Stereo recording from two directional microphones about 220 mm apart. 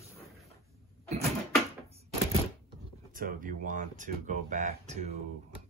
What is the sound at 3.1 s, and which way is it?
Speech, 40° right (ahead or behind).